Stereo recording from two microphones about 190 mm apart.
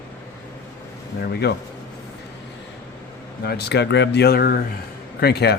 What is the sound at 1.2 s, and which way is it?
Speech, 55° left (ahead or behind).